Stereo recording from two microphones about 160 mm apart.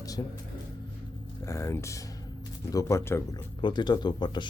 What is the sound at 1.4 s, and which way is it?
Speech, 20° left (ahead or behind).